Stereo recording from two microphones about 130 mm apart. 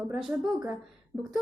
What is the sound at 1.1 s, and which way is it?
Speech, 25° right (ahead or behind).